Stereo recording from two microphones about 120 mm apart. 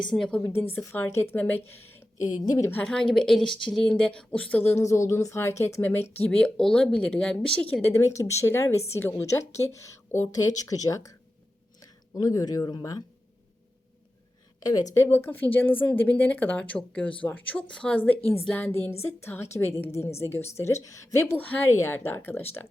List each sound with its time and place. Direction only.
0.0 s speech: 5° left (ahead or behind)
2.2 s speech: 35° left (ahead or behind)
2.8 s speech: 5° left (ahead or behind)
4.8 s a woman's voice: 25° left (ahead or behind)
14.6 s speech: 35° left (ahead or behind)
15.0 s a woman's voice: 20° left (ahead or behind)